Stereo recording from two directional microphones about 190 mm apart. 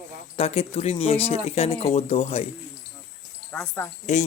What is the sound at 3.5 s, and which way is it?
Speech, 10° left (ahead or behind).